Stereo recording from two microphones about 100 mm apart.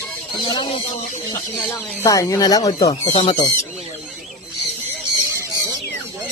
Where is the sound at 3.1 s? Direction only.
90° left.